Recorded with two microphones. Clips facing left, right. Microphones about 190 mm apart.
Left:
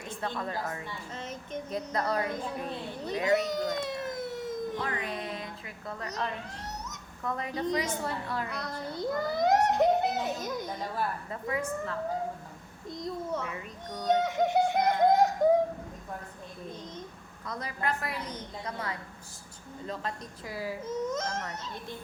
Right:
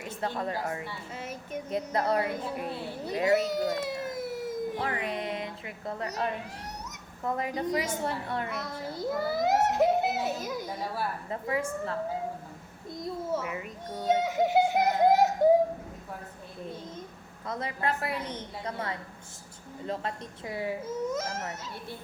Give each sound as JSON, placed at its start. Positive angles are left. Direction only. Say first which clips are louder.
{"t": 0.2, "sound": "a woman's voice", "louder": "right 2 dB", "side_deg": -30}
{"t": 0.9, "sound": "a woman's voice", "louder": "right 1 dB", "side_deg": -10}
{"t": 1.7, "sound": "a woman's voice", "louder": "right 3 dB", "side_deg": -25}
{"t": 2.2, "sound": "a woman's voice", "louder": "right 1 dB", "side_deg": -10}
{"t": 3.4, "sound": "a sound", "louder": "right 2 dB", "side_deg": -5}
{"t": 4.8, "sound": "a woman's voice", "louder": "right 2 dB", "side_deg": -30}
{"t": 8.6, "sound": "a child's voice", "louder": "even", "side_deg": 0}
{"t": 11.3, "sound": "a woman's voice", "louder": "right 2 dB", "side_deg": -30}
{"t": 12.9, "sound": "a sound", "louder": "right 2 dB", "side_deg": -5}
{"t": 13.4, "sound": "a woman's voice", "louder": "right 2 dB", "side_deg": -20}
{"t": 13.9, "sound": "a sound", "louder": "even", "side_deg": -5}
{"t": 17.4, "sound": "a woman's voice", "louder": "right 2 dB", "side_deg": -25}
{"t": 20.8, "sound": "a woman's voice", "louder": "right 1 dB", "side_deg": -5}